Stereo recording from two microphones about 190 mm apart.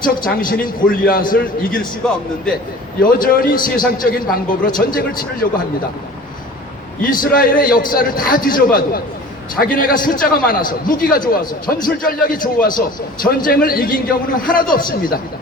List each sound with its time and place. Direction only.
0.0 s a man's voice: 45° left (ahead or behind)
3.0 s a man's voice: 45° left (ahead or behind)
7.3 s a man's voice: 50° left (ahead or behind)